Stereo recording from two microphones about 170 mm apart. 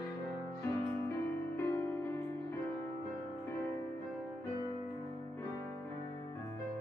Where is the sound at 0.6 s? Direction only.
15° left (ahead or behind).